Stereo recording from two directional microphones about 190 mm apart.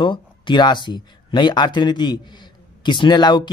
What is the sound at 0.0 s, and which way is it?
Speech, 25° left (ahead or behind).